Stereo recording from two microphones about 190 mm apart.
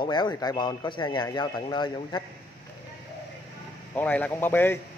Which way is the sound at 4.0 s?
5° left (ahead or behind).